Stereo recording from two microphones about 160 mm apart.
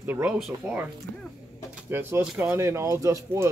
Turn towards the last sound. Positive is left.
turn(degrees=-20)  # may be behind; listen again after turning